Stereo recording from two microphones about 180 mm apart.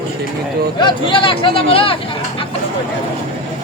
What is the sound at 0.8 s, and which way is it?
Speech, 25° left (ahead or behind).